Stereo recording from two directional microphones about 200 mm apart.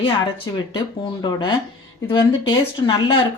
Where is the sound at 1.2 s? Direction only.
25° left (ahead or behind).